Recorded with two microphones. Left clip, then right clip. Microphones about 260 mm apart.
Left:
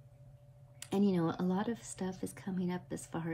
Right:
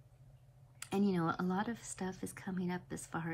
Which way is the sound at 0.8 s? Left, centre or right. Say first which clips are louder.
Left 3 dB; right.